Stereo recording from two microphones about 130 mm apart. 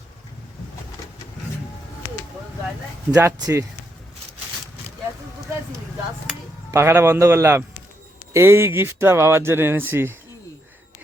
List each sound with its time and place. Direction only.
3.1 s speech: 15° right (ahead or behind)
3.3 s speech: 25° right (ahead or behind)
6.7 s speech: 20° right (ahead or behind)